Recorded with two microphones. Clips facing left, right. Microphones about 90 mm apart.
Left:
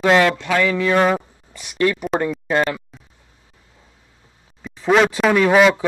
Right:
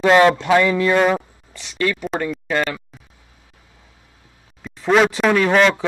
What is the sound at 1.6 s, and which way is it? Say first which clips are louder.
Speech: left 3 dB; 15° left (ahead or behind).